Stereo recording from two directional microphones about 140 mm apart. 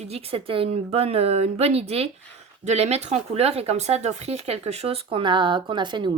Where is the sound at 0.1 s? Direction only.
45° right (ahead or behind).